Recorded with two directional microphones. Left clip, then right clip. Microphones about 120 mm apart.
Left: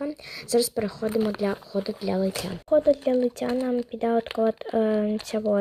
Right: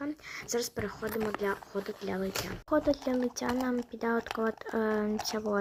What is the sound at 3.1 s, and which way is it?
Speech, 25° left (ahead or behind).